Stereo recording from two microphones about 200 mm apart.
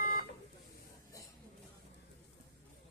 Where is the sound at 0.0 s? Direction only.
45° left (ahead or behind).